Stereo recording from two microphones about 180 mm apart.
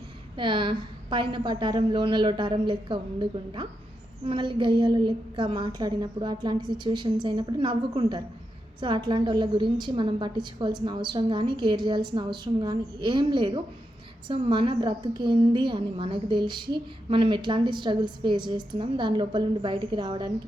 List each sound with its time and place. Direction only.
0.3 s a woman's voice: 25° right (ahead or behind)